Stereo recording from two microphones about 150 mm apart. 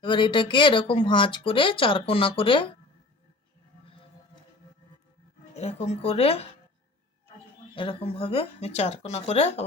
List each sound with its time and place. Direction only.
0.0 s speech: 35° left (ahead or behind)
5.5 s speech: 45° left (ahead or behind)
7.8 s speech: 35° left (ahead or behind)